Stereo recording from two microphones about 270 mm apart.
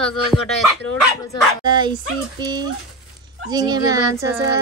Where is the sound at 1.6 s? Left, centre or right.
Centre.